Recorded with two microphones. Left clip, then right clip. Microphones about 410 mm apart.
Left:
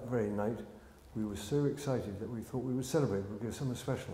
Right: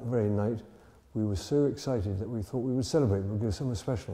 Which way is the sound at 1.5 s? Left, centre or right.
Right.